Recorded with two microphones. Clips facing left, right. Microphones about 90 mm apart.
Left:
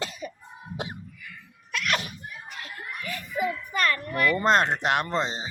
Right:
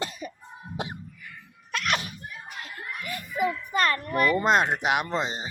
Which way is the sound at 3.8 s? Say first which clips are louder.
Even; 30° right (ahead or behind).